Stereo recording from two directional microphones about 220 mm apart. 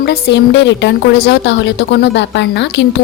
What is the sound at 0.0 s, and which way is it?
A woman's voice, 50° left (ahead or behind).